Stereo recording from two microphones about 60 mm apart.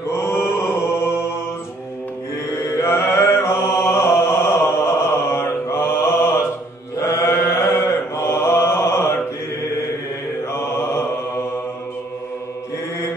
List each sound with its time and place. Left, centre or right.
0.1 s mantra: left
2.8 s mantra: left
7.0 s mantra: left
10.5 s mantra: left